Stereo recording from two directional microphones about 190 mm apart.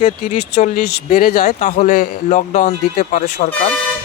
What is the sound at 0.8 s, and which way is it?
Speech, 55° left (ahead or behind).